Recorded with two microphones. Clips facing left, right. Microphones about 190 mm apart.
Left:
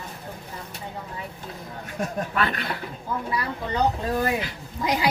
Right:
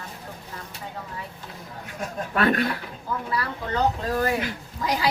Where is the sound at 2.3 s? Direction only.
45° right (ahead or behind).